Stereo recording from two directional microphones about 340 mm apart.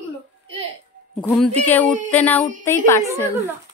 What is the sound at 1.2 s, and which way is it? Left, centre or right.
A woman's voice, centre.